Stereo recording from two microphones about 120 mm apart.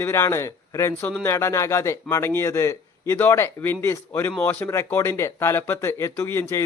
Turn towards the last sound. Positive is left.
turn(degrees=20)  # may be behind; listen again after turning